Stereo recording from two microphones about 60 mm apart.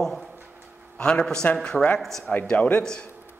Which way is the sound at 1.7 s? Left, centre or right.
Centre.